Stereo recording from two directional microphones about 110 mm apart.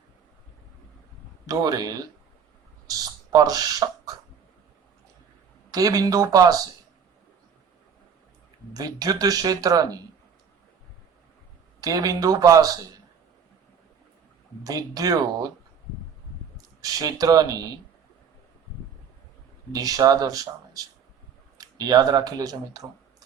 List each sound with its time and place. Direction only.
1.5 s speech: 35° right (ahead or behind)
3.3 s speech: 35° right (ahead or behind)
5.7 s speech: 35° right (ahead or behind)
8.7 s speech: 35° right (ahead or behind)
11.8 s speech: 35° right (ahead or behind)
14.6 s speech: 35° right (ahead or behind)
16.6 s speech: 35° right (ahead or behind)
19.7 s speech: 35° right (ahead or behind)